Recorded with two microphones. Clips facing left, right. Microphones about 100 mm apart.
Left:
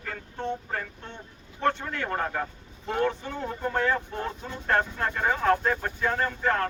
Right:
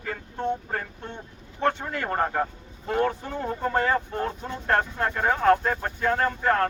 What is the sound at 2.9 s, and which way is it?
Speech, 5° right (ahead or behind).